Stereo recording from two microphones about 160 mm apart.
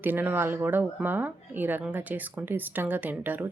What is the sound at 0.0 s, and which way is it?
A woman's voice, 10° right (ahead or behind).